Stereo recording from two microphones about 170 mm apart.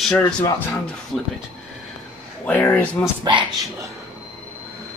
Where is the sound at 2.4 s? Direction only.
10° left (ahead or behind).